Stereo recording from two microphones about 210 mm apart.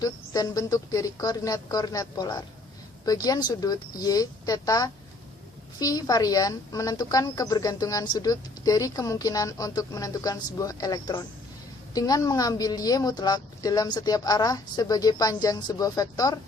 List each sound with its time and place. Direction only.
0.0 s speech: 15° left (ahead or behind)